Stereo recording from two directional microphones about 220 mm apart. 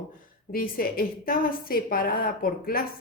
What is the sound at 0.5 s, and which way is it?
A woman's voice, 40° left (ahead or behind).